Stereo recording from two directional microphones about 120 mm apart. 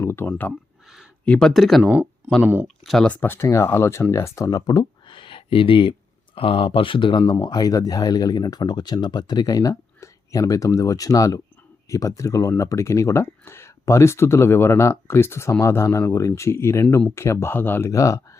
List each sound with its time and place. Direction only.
0.0 s speech: 20° left (ahead or behind); by 1.9 s centre (ahead or behind)
1.9 s speech: 15° right (ahead or behind)
2.8 s speech: 5° left (ahead or behind)
3.2 s speech: 20° left (ahead or behind)